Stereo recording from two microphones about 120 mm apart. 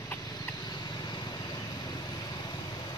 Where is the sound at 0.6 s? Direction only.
35° left (ahead or behind).